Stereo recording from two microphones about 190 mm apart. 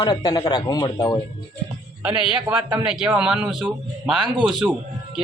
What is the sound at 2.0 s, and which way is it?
A man's voice, 10° right (ahead or behind).